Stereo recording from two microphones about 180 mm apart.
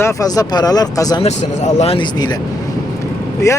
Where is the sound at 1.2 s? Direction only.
40° left (ahead or behind).